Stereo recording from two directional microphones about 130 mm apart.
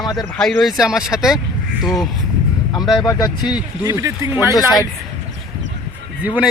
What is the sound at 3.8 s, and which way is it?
Speech, 25° right (ahead or behind).